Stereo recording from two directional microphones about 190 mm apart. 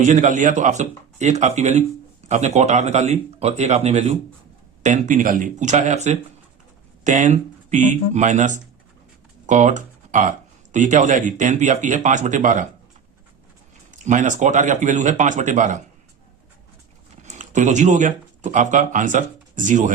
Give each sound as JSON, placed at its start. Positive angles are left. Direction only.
{"t": 0.0, "sound": "speech", "side_deg": -40}
{"t": 13.9, "sound": "speech", "side_deg": -40}
{"t": 17.2, "sound": "speech", "side_deg": -40}